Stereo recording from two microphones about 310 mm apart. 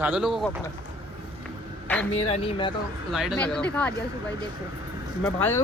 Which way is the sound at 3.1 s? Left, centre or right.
Centre.